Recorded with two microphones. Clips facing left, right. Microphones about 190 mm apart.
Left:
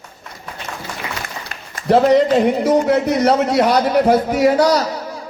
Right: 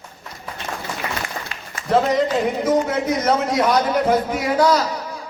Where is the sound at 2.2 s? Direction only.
65° left (ahead or behind).